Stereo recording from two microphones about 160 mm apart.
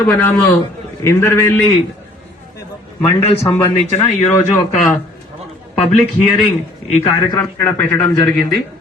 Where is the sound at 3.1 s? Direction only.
40° left (ahead or behind).